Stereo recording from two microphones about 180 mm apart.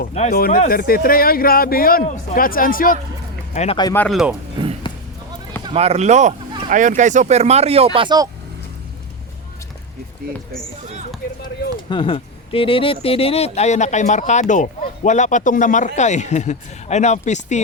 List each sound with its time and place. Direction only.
0.0 s speech: 40° left (ahead or behind)
0.3 s speech: 55° left (ahead or behind)
3.5 s speech: 40° left (ahead or behind)
3.9 s speech: 10° left (ahead or behind)
5.6 s speech: 35° right (ahead or behind)
7.9 s speech: 25° right (ahead or behind)
11.9 s speech: 30° left (ahead or behind)